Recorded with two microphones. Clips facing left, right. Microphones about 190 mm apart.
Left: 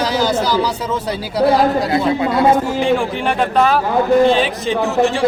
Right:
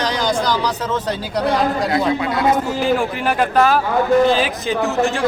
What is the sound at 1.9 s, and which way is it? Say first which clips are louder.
Speech: left 2 dB; 30° left (ahead or behind).